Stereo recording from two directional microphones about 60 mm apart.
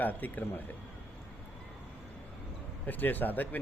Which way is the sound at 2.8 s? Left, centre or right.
Left.